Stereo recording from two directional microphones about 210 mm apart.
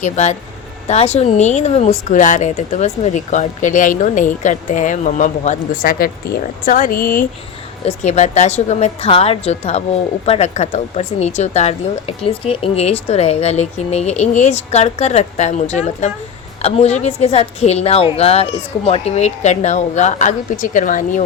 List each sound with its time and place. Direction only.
0.0 s speech: 35° left (ahead or behind)